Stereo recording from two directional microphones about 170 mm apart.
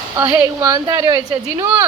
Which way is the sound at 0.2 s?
20° right (ahead or behind).